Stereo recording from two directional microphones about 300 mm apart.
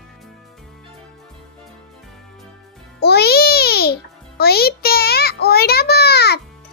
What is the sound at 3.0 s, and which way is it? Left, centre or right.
A child's voice, left.